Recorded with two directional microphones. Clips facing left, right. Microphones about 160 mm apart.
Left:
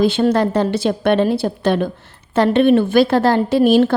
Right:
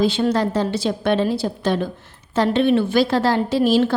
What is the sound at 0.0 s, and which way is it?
A woman's voice, 55° left (ahead or behind).